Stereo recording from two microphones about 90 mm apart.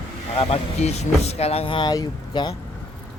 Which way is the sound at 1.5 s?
90° left.